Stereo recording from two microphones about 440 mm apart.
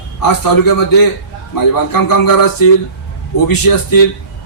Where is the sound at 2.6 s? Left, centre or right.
Left.